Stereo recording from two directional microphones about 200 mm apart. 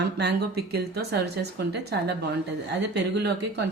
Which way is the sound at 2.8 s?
55° right (ahead or behind).